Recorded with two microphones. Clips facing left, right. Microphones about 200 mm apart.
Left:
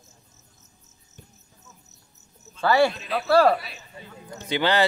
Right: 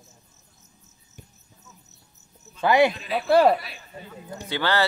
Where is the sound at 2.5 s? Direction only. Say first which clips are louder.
Right 1 dB; 15° right (ahead or behind).